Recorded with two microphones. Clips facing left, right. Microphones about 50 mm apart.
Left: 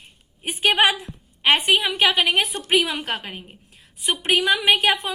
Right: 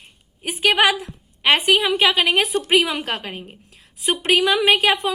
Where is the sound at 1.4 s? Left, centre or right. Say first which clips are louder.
Right 2 dB; right.